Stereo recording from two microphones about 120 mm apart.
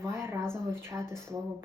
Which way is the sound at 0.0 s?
20° right (ahead or behind).